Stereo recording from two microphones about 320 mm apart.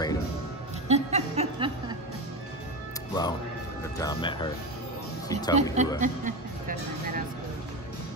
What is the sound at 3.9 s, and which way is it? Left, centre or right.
Speech, centre.